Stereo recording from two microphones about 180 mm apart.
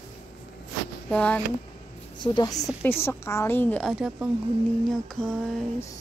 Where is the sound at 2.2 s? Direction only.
20° left (ahead or behind); by 4.3 s centre (ahead or behind).